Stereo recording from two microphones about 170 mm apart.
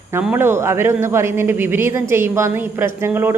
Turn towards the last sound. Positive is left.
turn(degrees=-15)  # may be behind; listen again after turning